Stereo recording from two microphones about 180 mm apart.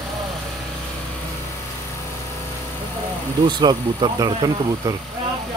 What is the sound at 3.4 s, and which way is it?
Speech, 25° right (ahead or behind).